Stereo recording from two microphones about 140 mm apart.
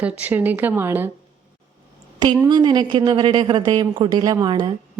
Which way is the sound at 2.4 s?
30° right (ahead or behind).